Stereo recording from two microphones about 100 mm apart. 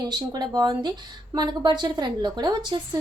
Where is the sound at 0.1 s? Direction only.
45° right (ahead or behind).